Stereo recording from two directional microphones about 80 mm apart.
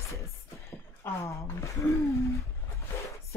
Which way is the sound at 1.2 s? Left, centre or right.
Left.